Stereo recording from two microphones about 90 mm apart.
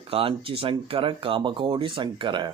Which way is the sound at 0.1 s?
85° right.